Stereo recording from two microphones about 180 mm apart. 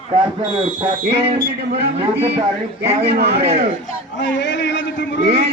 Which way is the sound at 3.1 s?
60° right (ahead or behind).